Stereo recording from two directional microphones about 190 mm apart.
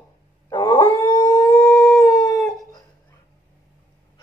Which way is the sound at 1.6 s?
Centre (ahead or behind).